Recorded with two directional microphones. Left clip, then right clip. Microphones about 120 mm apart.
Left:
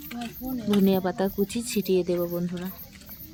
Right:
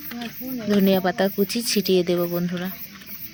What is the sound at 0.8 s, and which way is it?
Speech, 15° right (ahead or behind).